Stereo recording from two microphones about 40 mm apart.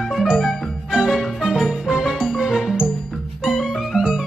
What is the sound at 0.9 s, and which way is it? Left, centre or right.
Music, centre.